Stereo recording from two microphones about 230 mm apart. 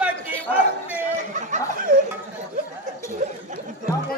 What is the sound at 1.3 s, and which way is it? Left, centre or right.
Snicker, right.